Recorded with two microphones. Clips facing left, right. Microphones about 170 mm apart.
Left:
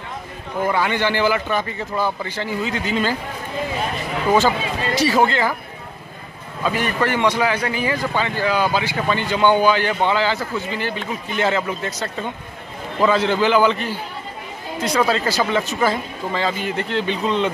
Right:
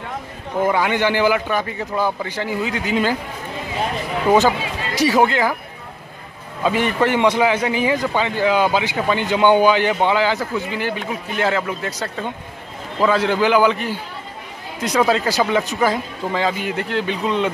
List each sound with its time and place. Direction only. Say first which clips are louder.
0.7 s a man's voice: right 2 dB; 15° right (ahead or behind)
4.3 s speech: right 2 dB; 15° right (ahead or behind)
6.6 s a man's voice: right 3 dB; 20° right (ahead or behind)
15.0 s a man's voice: right 2 dB; 15° right (ahead or behind)